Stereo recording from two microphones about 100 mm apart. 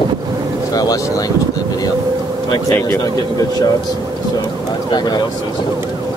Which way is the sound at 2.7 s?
25° left (ahead or behind).